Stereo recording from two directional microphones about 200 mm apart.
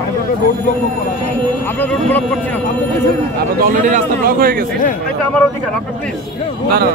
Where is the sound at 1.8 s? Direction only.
10° left (ahead or behind).